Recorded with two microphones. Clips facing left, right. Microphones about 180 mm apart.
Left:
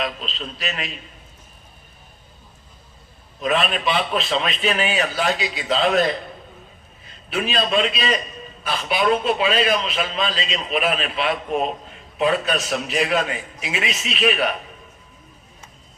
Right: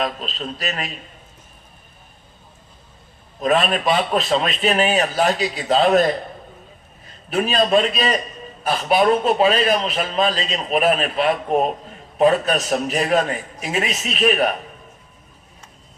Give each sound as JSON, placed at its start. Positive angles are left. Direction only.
{"t": 0.0, "sound": "a man's voice", "side_deg": -45}
{"t": 3.4, "sound": "a man's voice", "side_deg": -40}
{"t": 7.3, "sound": "a man's voice", "side_deg": -45}